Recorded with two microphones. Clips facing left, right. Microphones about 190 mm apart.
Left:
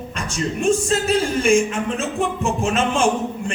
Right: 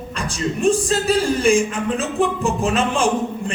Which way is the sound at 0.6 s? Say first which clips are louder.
Right 1 dB; 35° right (ahead or behind).